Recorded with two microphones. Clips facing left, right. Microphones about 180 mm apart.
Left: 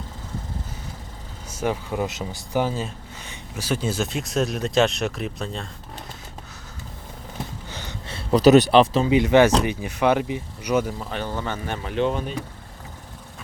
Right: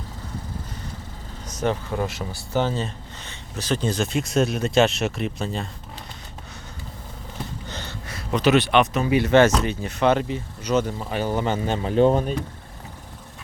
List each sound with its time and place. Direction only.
1.5 s speech: 10° left (ahead or behind)
7.7 s a sound: 10° left (ahead or behind)
8.0 s speech: 30° left (ahead or behind)
9.1 s speech: 15° left (ahead or behind)
10.9 s speech: 5° right (ahead or behind); by 12.2 s 40° right (ahead or behind)